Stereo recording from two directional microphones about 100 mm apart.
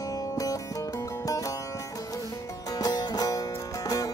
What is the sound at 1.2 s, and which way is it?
Music, 35° left (ahead or behind).